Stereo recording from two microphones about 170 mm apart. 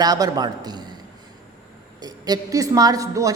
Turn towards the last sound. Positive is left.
turn(degrees=-20)  # may be behind; listen again after turning